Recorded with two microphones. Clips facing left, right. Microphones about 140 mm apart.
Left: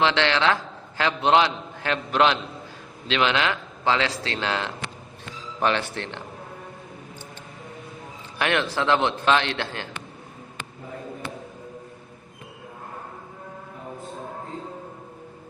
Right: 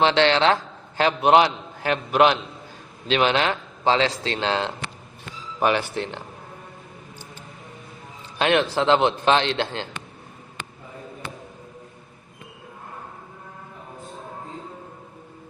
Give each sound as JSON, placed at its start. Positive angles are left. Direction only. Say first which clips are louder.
{"t": 0.0, "sound": "a man's voice", "louder": "right 3 dB", "side_deg": -20}
{"t": 5.5, "sound": "speech", "louder": "right 2 dB", "side_deg": -15}
{"t": 8.4, "sound": "a man's voice", "louder": "right 4 dB", "side_deg": -20}